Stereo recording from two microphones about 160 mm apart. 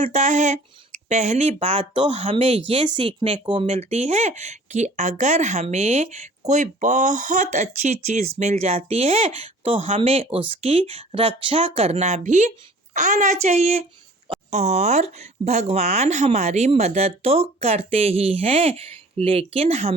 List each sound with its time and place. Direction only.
0.0 s speech: 45° right (ahead or behind)